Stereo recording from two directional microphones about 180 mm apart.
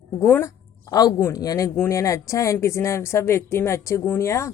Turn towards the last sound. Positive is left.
turn(degrees=15)  # may be behind; listen again after turning